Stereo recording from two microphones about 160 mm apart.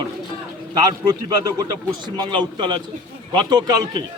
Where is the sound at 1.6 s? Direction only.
25° right (ahead or behind).